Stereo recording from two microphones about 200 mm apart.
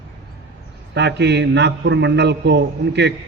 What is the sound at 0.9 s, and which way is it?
A man's voice, 60° right (ahead or behind).